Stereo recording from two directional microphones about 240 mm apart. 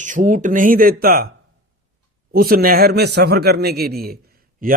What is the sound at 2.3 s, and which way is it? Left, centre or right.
Speech, right.